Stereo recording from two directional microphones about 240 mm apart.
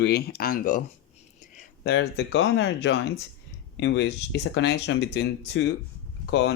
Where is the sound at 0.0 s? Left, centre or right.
Left.